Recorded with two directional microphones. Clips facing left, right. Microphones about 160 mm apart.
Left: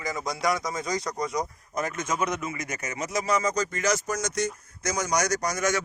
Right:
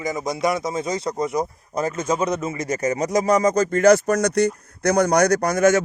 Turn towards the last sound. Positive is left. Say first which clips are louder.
# right 10 dB
turn(degrees=-50)  # may be behind; listen again after turning